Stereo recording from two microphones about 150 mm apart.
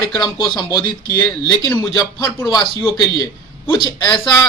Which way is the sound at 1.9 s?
20° left (ahead or behind).